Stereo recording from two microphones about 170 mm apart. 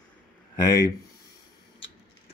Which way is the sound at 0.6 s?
20° left (ahead or behind).